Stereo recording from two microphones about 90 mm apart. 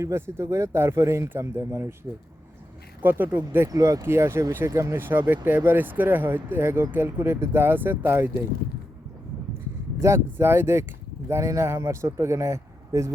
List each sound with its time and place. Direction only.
0.0 s speech: 30° right (ahead or behind)
3.0 s speech: 20° right (ahead or behind)
3.7 s speech: 40° right (ahead or behind)
4.0 s speech: 30° right (ahead or behind)
10.0 s speech: 30° right (ahead or behind)